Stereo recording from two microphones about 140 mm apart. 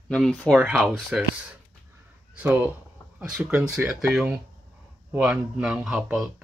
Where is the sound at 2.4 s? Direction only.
15° right (ahead or behind).